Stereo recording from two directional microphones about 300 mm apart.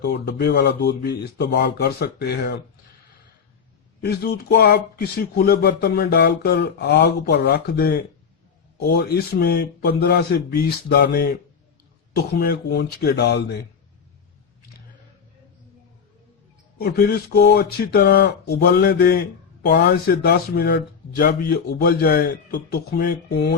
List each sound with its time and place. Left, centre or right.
0.0 s speech: left
4.0 s speech: left
16.7 s speech: left